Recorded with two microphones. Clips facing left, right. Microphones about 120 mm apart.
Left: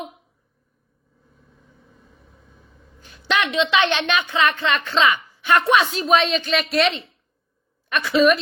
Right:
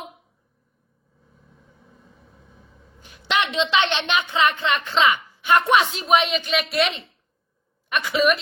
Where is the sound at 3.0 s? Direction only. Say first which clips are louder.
Left 1 dB; 15° right (ahead or behind).